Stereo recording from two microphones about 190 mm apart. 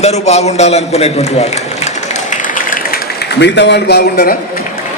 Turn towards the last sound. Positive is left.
turn(degrees=55)  # may be behind; listen again after turning